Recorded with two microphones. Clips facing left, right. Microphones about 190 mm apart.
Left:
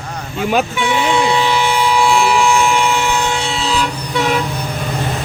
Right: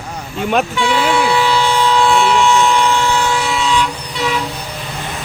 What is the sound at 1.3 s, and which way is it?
Siren, 20° left (ahead or behind).